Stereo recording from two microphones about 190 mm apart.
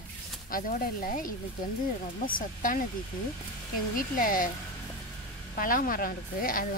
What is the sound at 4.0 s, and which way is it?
Speech, 45° left (ahead or behind).